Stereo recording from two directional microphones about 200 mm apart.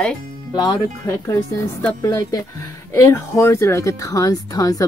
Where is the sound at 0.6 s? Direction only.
15° left (ahead or behind).